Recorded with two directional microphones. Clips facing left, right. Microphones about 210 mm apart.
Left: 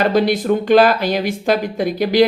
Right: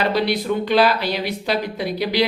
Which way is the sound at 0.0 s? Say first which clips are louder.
Left 5 dB; 45° left (ahead or behind).